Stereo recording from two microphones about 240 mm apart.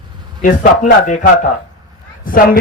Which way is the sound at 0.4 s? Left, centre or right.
Left.